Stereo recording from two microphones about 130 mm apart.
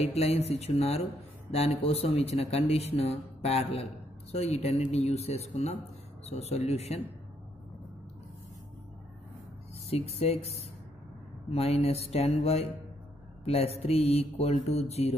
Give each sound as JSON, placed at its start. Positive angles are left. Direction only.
{"t": 0.1, "sound": "speech", "side_deg": 55}
{"t": 9.8, "sound": "speech", "side_deg": 55}